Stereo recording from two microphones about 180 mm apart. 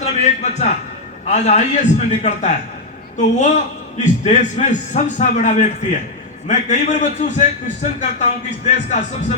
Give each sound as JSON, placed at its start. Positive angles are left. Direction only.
{"t": 0.0, "sound": "a man's voice", "side_deg": 40}